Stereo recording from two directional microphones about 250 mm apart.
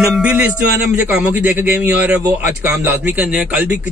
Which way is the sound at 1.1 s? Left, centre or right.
Centre.